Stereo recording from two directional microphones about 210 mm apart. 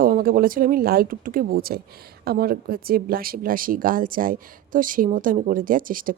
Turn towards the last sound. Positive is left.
turn(degrees=-40)  # may be behind; listen again after turning